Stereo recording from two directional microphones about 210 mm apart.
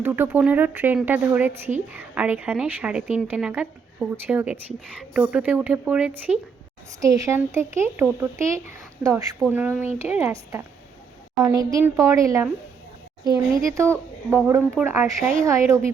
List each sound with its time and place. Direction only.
0.0 s a woman's voice: 10° right (ahead or behind)